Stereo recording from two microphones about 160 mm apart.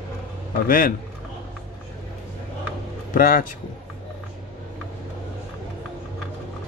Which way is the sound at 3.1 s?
60° left (ahead or behind).